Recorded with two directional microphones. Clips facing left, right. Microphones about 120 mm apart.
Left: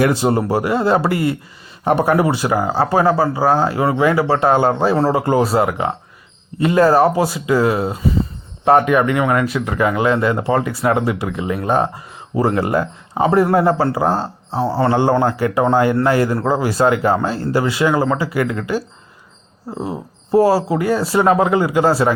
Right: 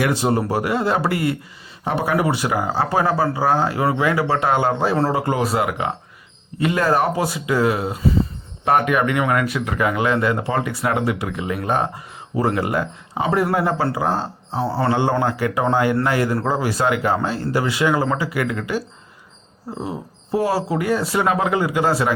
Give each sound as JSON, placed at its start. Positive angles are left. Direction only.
{"t": 0.0, "sound": "speech", "side_deg": 30}
{"t": 1.8, "sound": "speech", "side_deg": 50}
{"t": 2.1, "sound": "speech", "side_deg": 30}
{"t": 20.3, "sound": "speech", "side_deg": 35}